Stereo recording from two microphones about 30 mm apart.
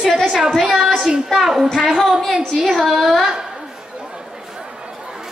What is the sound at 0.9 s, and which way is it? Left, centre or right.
Speech, right.